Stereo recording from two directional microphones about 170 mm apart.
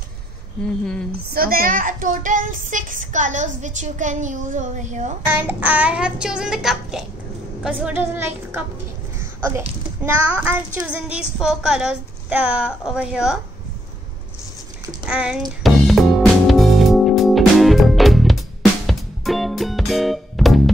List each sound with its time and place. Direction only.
1.3 s speech: 60° right (ahead or behind); by 5.1 s 45° right (ahead or behind)
5.2 s a woman's voice: 10° right (ahead or behind)
10.0 s a woman's voice: 5° right (ahead or behind)
15.0 s a woman's voice: 5° right (ahead or behind)
15.6 s music: centre (ahead or behind)